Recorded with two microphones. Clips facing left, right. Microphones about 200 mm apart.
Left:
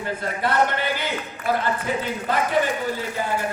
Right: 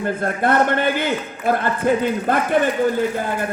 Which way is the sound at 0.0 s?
50° right (ahead or behind).